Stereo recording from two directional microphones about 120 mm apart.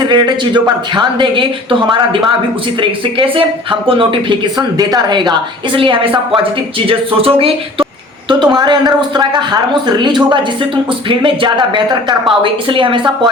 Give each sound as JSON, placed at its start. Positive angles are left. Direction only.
{"t": 0.0, "sound": "speech", "side_deg": -40}
{"t": 8.3, "sound": "speech", "side_deg": -40}